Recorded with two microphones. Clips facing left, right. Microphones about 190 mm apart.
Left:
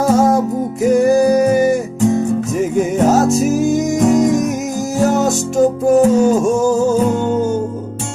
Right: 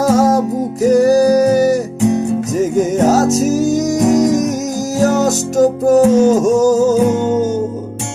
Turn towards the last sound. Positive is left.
turn(degrees=-45)  # may be behind; listen again after turning